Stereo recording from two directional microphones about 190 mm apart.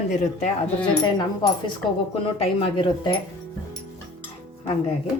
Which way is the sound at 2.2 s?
30° left (ahead or behind).